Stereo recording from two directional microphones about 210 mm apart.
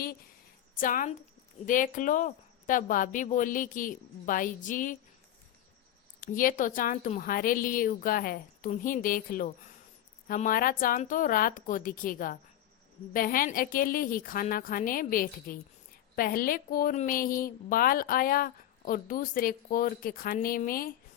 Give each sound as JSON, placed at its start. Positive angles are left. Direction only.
{"t": 0.8, "sound": "speech", "side_deg": 40}
{"t": 6.1, "sound": "a woman's voice", "side_deg": 40}